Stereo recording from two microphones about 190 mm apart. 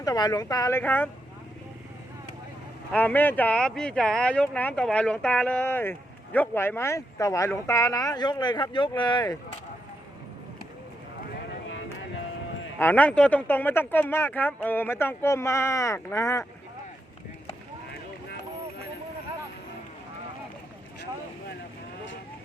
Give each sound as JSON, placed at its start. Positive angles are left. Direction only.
{"t": 0.0, "sound": "a woman's voice", "side_deg": 20}
{"t": 2.9, "sound": "speech", "side_deg": 10}
{"t": 12.8, "sound": "speech", "side_deg": 10}